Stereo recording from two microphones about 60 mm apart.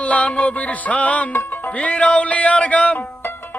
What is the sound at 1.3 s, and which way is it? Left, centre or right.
Music, left.